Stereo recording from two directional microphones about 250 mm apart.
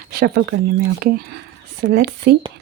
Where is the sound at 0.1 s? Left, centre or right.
Right.